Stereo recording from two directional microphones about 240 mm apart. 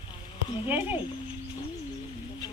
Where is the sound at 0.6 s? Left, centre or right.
Centre.